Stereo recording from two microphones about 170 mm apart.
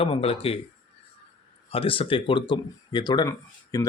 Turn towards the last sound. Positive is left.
turn(degrees=20)  # may be behind; listen again after turning